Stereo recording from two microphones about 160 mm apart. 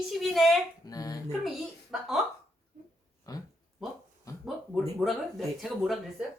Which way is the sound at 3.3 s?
20° left (ahead or behind).